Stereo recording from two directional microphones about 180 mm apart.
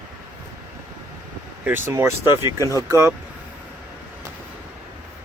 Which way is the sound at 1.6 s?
10° right (ahead or behind).